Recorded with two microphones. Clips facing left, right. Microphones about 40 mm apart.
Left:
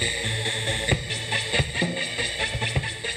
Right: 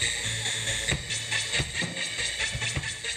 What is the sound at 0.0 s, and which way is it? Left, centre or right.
Music, left.